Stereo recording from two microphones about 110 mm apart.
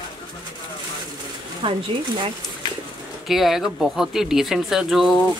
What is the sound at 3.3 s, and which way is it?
Speech, centre (ahead or behind).